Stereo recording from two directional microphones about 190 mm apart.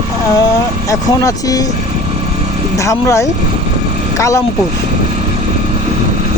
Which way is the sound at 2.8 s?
15° left (ahead or behind).